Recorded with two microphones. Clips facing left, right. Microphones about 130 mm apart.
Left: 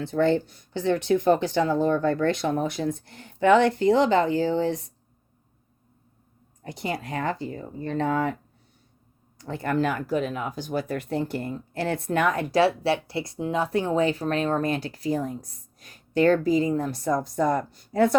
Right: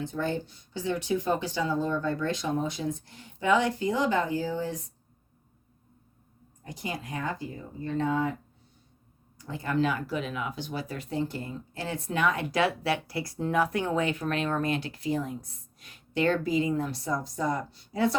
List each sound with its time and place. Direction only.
0.0 s speech: 80° left
6.7 s speech: 75° left (ahead or behind)
9.4 s speech: 60° left (ahead or behind)